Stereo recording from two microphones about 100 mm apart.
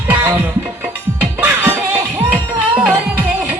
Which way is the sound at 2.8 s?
15° right (ahead or behind).